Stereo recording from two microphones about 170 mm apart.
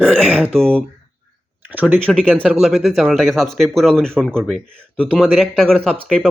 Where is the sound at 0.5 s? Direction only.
5° left (ahead or behind).